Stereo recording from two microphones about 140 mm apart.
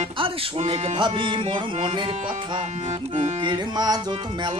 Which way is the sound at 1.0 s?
35° right (ahead or behind).